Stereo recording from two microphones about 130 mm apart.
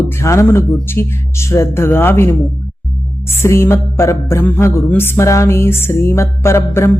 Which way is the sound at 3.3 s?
20° left (ahead or behind).